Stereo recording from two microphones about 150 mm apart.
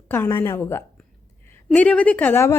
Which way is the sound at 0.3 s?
15° left (ahead or behind).